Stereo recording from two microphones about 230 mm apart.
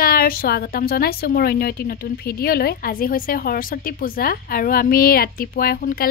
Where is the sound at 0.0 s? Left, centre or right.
Left.